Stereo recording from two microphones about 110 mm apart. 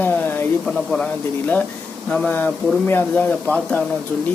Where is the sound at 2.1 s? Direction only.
10° left (ahead or behind).